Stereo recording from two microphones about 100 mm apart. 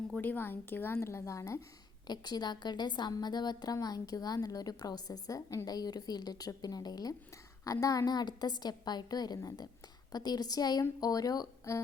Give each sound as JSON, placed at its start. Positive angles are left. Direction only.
{"t": 0.2, "sound": "speech", "side_deg": 20}
{"t": 2.0, "sound": "a woman's voice", "side_deg": 45}